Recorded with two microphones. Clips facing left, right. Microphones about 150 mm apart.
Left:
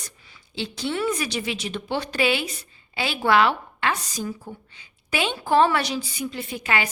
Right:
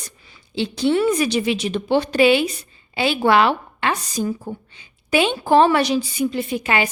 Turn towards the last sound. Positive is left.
turn(degrees=-20)  # may be behind; listen again after turning